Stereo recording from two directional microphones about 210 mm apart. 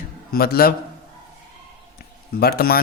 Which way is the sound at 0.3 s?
45° left (ahead or behind).